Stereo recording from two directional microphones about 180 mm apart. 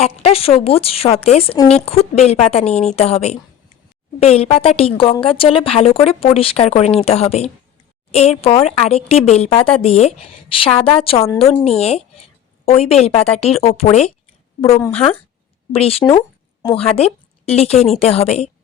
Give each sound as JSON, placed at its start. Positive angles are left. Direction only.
{"t": 0.0, "sound": "speech", "side_deg": 30}
{"t": 15.7, "sound": "a woman's voice", "side_deg": 35}